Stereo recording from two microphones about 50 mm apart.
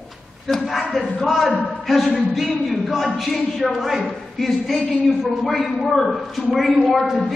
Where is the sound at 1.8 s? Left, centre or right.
Centre.